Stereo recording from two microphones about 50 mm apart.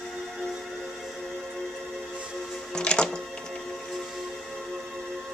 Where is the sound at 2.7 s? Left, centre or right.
Centre.